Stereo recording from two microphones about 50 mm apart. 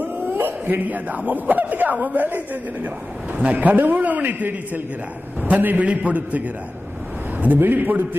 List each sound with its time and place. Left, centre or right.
0.0 s a man's voice: right